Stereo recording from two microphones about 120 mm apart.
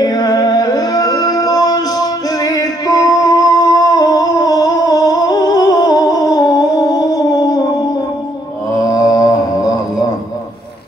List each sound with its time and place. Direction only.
0.0 s music: 30° left (ahead or behind)
8.8 s mantra: 30° left (ahead or behind)